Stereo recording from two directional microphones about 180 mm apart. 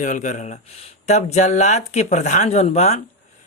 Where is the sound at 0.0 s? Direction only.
45° left (ahead or behind).